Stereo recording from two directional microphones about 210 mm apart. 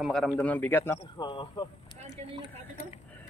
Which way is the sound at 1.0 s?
25° left (ahead or behind).